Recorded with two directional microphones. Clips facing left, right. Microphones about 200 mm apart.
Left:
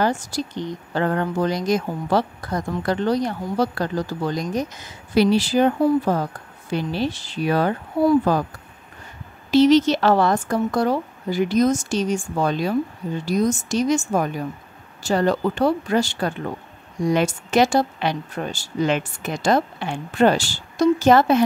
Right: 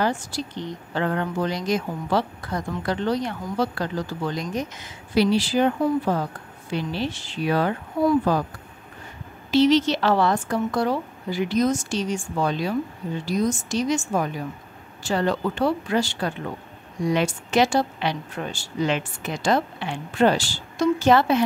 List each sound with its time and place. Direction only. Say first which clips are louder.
0.0 s a woman's voice: left 3 dB; 40° left (ahead or behind)
9.5 s speech: left 3 dB; 45° left (ahead or behind)